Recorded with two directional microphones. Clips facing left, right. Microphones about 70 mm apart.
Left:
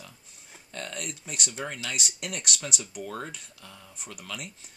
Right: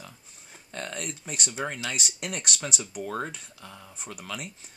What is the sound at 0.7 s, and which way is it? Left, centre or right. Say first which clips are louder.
Speech: right 2 dB; right.